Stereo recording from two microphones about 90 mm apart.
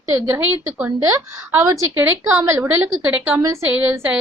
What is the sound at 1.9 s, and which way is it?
A woman's voice, 25° right (ahead or behind).